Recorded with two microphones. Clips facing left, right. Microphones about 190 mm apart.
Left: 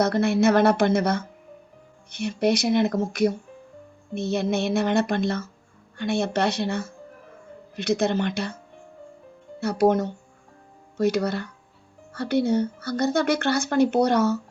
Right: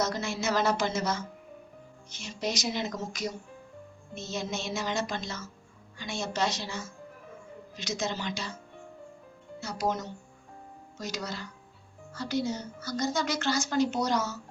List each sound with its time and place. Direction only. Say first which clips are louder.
0.0 s speech: left 11 dB; 60° left (ahead or behind)
9.6 s speech: left 11 dB; 60° left (ahead or behind)